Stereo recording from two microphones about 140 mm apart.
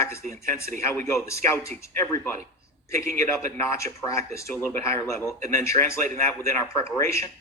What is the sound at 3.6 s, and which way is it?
Speech, 20° left (ahead or behind).